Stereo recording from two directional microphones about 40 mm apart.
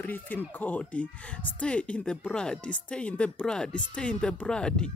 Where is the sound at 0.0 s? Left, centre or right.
Left.